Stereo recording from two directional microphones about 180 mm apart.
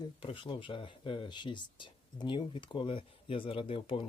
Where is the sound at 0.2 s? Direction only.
30° left (ahead or behind).